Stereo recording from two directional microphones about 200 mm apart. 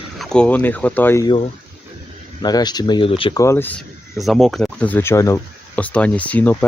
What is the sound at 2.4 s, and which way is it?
Speech, 20° left (ahead or behind).